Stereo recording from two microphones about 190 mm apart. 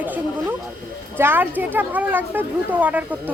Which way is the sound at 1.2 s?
10° right (ahead or behind).